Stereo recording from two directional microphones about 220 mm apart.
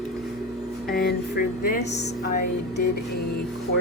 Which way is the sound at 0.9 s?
40° left (ahead or behind).